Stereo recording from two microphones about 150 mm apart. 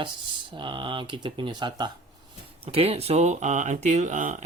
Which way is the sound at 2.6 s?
40° right (ahead or behind).